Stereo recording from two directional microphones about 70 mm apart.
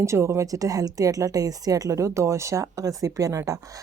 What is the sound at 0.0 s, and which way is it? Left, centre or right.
Speech, right.